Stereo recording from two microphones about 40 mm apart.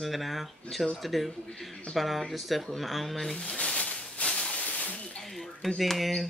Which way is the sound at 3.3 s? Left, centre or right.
Left.